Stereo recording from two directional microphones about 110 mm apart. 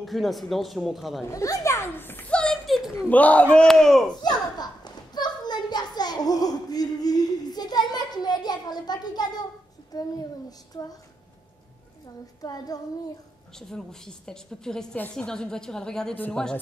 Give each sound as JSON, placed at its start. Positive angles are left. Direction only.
{"t": 0.0, "sound": "a woman's voice", "side_deg": 0}
{"t": 1.2, "sound": "a child's voice", "side_deg": 30}
{"t": 3.1, "sound": "a woman's voice", "side_deg": 15}
{"t": 4.1, "sound": "children playing", "side_deg": 40}
{"t": 9.9, "sound": "a child's voice", "side_deg": 35}
{"t": 10.7, "sound": "child singing", "side_deg": 35}
{"t": 12.4, "sound": "child singing", "side_deg": 35}
{"t": 13.6, "sound": "a woman's voice", "side_deg": 5}